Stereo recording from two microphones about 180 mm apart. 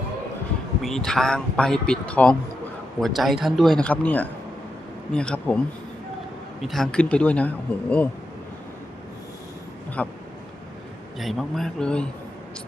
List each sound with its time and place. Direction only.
0.8 s speech: centre (ahead or behind)
6.6 s speech: centre (ahead or behind)
10.0 s speech: 10° left (ahead or behind)
11.2 s speech: centre (ahead or behind)